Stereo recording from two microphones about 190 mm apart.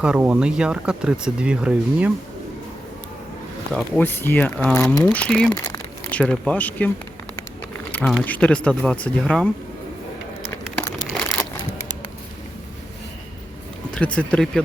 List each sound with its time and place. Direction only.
0.0 s speech: 5° right (ahead or behind)
3.7 s speech: 5° left (ahead or behind)
7.9 s speech: 5° left (ahead or behind)
11.1 s a sound: 5° left (ahead or behind)
13.9 s speech: 5° left (ahead or behind)